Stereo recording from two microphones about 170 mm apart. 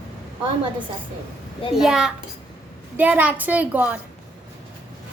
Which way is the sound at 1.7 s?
5° right (ahead or behind).